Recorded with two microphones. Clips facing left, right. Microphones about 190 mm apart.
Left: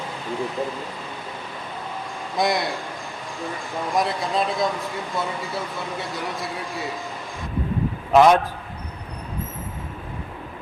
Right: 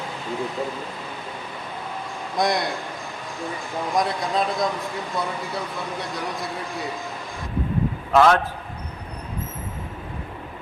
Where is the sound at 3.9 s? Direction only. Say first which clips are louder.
Even; centre (ahead or behind).